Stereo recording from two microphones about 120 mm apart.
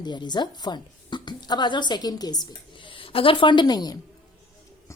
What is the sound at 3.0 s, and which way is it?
A woman's voice, 50° left (ahead or behind).